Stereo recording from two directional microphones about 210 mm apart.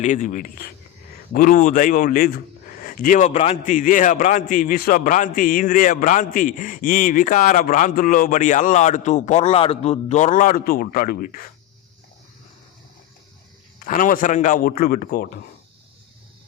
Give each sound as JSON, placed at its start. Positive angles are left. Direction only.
{"t": 0.0, "sound": "a man's voice", "side_deg": 35}
{"t": 13.7, "sound": "a man's voice", "side_deg": 40}